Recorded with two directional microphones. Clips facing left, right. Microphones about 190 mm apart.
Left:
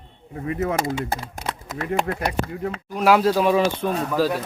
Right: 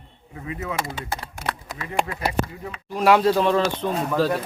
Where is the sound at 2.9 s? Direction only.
Centre (ahead or behind).